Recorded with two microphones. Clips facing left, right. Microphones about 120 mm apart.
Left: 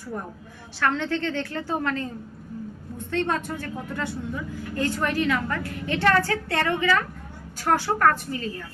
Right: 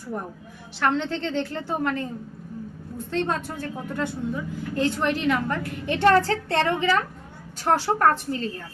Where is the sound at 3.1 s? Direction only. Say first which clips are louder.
Even; 20° right (ahead or behind).